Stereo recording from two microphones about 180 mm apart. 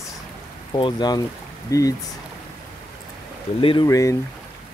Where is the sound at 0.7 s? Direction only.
25° left (ahead or behind).